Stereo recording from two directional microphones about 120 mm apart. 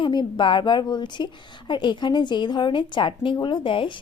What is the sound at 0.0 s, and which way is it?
A woman's voice, 40° left (ahead or behind).